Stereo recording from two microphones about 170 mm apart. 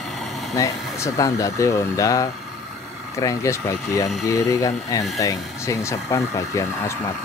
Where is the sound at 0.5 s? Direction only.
20° left (ahead or behind).